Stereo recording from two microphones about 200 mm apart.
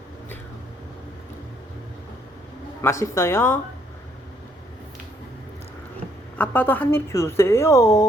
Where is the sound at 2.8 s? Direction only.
15° left (ahead or behind).